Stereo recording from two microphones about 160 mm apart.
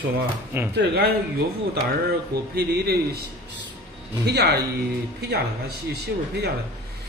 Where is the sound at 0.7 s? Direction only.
90° right.